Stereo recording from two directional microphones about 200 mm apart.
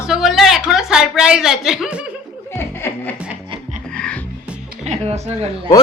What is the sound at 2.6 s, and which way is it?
Music, 10° left (ahead or behind).